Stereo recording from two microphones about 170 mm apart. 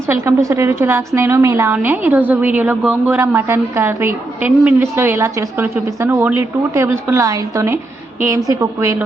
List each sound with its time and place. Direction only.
0.1 s a woman's voice: 15° right (ahead or behind)